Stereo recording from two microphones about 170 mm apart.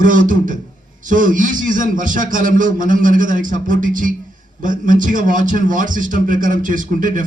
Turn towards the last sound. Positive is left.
turn(degrees=-50)  # may be behind; listen again after turning